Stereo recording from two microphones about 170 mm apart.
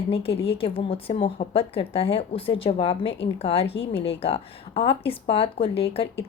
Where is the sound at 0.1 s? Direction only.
35° left (ahead or behind).